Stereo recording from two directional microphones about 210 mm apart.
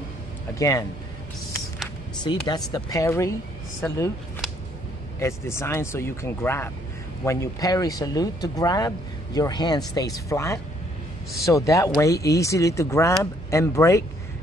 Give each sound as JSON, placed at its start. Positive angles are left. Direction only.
{"t": 0.6, "sound": "speech", "side_deg": 15}
{"t": 2.4, "sound": "speech", "side_deg": 20}
{"t": 5.2, "sound": "speech", "side_deg": 10}